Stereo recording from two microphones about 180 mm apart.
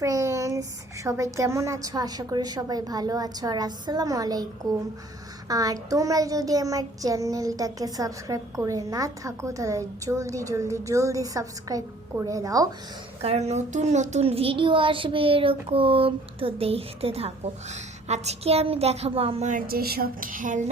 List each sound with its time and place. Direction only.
0.0 s a sound: 15° right (ahead or behind)
1.0 s a child's voice: 15° right (ahead or behind)
13.2 s a child's voice: 35° right (ahead or behind)